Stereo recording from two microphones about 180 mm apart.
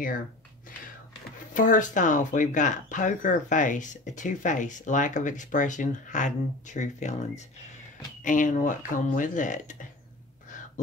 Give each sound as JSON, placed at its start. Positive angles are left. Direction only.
{"t": 1.5, "sound": "speech", "side_deg": 45}